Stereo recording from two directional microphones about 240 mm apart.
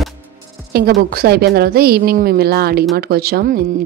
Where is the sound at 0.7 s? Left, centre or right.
Right.